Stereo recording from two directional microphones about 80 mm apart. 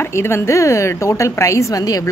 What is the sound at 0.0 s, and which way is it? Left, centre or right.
Speech, left.